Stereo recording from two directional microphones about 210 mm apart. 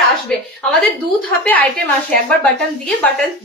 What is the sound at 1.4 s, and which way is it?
A woman's voice, 10° left (ahead or behind).